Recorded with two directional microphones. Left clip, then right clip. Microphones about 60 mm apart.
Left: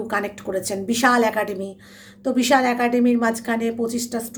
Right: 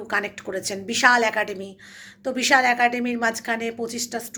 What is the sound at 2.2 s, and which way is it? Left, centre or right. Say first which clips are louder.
A woman's voice: left 1 dB; left.